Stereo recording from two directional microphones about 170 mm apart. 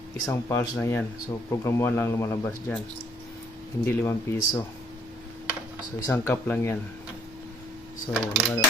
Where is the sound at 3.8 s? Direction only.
15° left (ahead or behind).